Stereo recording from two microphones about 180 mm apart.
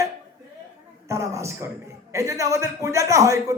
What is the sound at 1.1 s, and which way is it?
A man's voice, 15° right (ahead or behind).